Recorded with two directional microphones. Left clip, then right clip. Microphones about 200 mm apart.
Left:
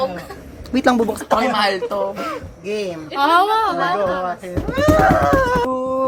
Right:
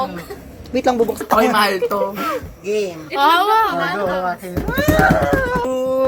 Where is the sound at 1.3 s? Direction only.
10° right (ahead or behind).